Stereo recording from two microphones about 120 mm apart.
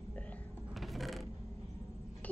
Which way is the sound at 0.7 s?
Centre (ahead or behind).